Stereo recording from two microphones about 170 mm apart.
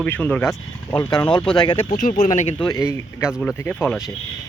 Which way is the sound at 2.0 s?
50° left (ahead or behind).